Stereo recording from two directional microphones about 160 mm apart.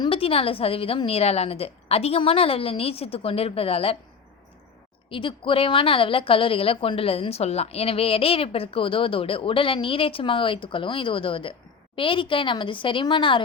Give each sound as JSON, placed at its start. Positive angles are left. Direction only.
{"t": 0.0, "sound": "a woman's voice", "side_deg": 35}
{"t": 5.1, "sound": "a woman's voice", "side_deg": 35}